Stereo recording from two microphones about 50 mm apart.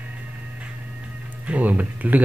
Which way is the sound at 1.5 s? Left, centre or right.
Right.